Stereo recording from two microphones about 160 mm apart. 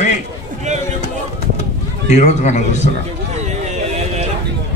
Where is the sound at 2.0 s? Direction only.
45° left (ahead or behind).